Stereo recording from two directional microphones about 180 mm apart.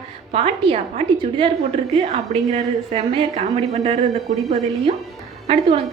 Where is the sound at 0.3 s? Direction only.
30° right (ahead or behind).